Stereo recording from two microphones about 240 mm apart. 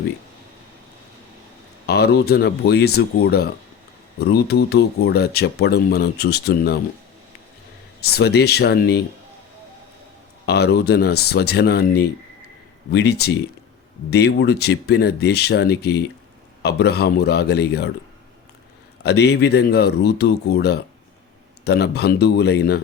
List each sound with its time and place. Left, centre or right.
1.9 s speech: left
8.1 s speech: left
10.4 s speech: left
19.0 s speech: left